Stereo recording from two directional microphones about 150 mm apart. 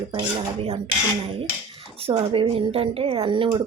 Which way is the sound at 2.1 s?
35° right (ahead or behind).